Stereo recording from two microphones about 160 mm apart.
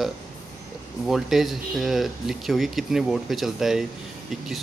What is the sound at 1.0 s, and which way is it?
Speech, centre (ahead or behind).